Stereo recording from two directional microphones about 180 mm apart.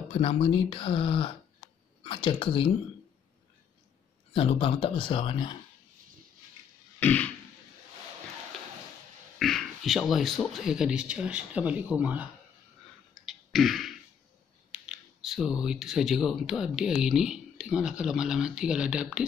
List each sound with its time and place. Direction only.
0.1 s speech: 30° left (ahead or behind)
4.3 s speech: 30° left (ahead or behind)
7.0 s a sound: 10° left (ahead or behind)
9.4 s speech: centre (ahead or behind)
13.2 s beatboxing: centre (ahead or behind)
14.7 s speech: 5° right (ahead or behind)